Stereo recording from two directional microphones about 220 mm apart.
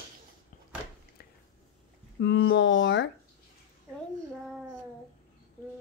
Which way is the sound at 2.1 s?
50° left (ahead or behind).